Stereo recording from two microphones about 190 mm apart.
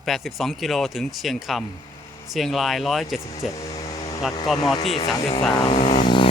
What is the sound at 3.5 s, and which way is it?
Vehicle, 20° left (ahead or behind).